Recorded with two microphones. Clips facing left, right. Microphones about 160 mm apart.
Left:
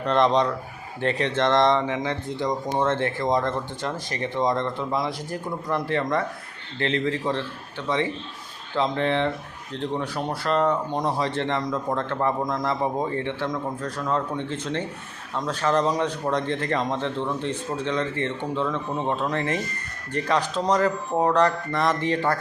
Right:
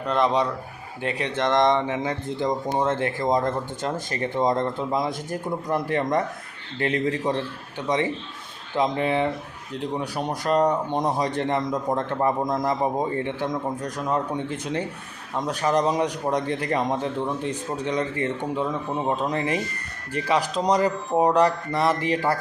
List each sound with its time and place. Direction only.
0.0 s speech: 5° right (ahead or behind)
3.4 s speech: 45° right (ahead or behind)
4.9 s speech: 20° right (ahead or behind)